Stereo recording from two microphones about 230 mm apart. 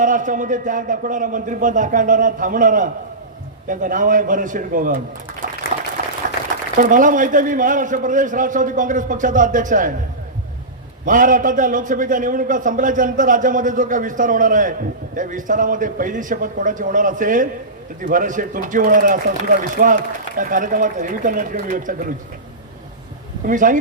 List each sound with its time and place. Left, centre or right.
0.0 s a man's voice: right
6.7 s a man's voice: right
11.0 s a man's voice: right
23.5 s a man's voice: right